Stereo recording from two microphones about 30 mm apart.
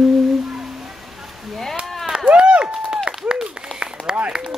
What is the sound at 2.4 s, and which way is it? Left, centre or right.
Run, right.